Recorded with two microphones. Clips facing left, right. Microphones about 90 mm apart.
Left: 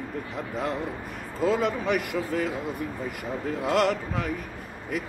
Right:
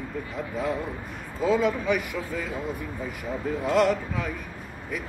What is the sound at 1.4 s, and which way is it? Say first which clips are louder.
A man's voice: right 1 dB; 60° left (ahead or behind).